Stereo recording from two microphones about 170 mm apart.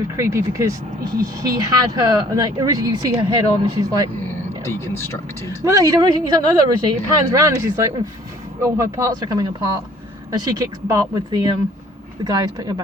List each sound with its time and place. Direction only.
0.2 s speech: 15° right (ahead or behind)
4.6 s speech: 15° left (ahead or behind)
5.6 s speech: 20° right (ahead or behind)